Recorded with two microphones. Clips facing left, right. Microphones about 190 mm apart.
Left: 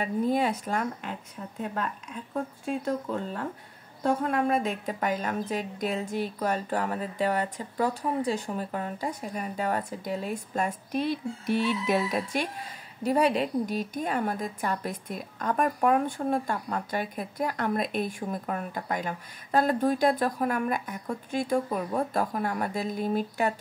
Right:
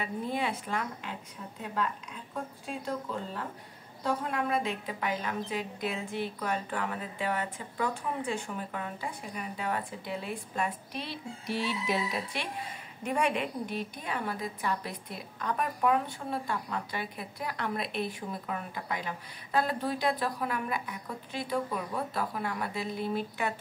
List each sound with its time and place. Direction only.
0.0 s a woman's voice: 40° left (ahead or behind)
4.0 s a woman's voice: 50° left (ahead or behind)
13.0 s a woman's voice: 35° left (ahead or behind)